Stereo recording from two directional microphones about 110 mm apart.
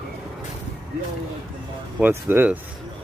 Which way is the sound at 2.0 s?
20° right (ahead or behind).